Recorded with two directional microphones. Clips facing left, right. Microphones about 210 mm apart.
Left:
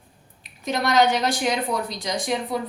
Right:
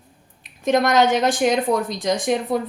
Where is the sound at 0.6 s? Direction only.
50° right (ahead or behind).